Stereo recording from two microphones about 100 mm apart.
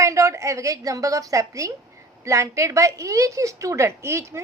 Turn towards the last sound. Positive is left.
turn(degrees=-30)  # may be behind; listen again after turning